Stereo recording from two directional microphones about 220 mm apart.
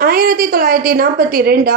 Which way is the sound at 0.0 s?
40° right (ahead or behind).